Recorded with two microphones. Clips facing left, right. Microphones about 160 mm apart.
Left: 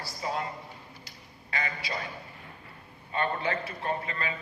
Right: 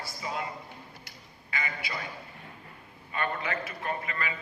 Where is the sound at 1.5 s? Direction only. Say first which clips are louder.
Left 2 dB; 35° left (ahead or behind).